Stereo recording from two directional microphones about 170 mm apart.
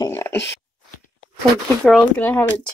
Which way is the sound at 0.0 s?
15° left (ahead or behind).